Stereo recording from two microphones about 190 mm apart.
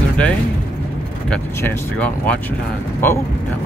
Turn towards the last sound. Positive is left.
turn(degrees=10)  # may be behind; listen again after turning